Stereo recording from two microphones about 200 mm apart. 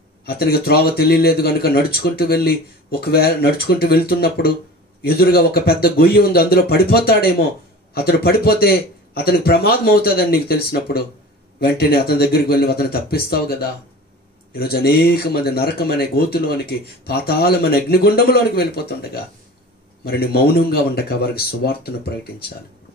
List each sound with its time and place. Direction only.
0.2 s speech: 50° left (ahead or behind)
20.1 s speech: 50° left (ahead or behind)